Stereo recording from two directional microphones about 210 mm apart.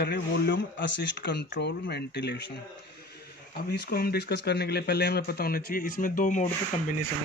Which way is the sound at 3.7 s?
50° left (ahead or behind).